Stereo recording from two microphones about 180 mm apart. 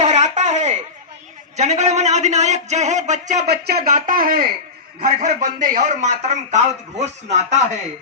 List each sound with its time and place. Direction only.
0.0 s a sound: 40° right (ahead or behind)
1.5 s a man's voice: 40° right (ahead or behind)
3.4 s a man's voice: 60° right (ahead or behind); by 7.6 s 40° right (ahead or behind)